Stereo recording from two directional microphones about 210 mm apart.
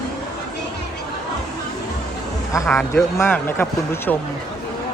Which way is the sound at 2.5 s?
15° left (ahead or behind).